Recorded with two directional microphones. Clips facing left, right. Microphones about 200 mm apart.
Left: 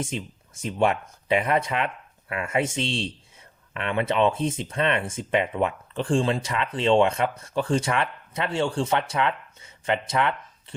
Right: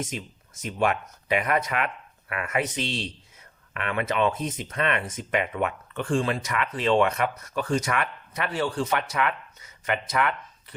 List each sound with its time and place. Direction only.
0.6 s speech: 30° left (ahead or behind)